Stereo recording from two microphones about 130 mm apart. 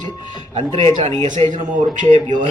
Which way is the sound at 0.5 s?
55° right (ahead or behind).